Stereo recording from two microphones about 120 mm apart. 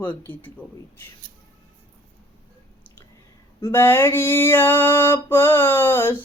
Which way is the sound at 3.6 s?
20° left (ahead or behind).